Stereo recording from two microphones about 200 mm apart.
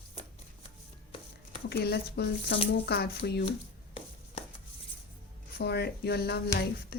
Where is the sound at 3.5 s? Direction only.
30° left (ahead or behind).